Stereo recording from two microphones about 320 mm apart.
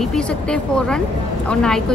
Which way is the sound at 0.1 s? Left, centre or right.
Centre.